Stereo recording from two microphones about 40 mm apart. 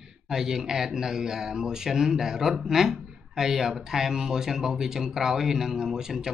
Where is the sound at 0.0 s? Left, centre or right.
Centre.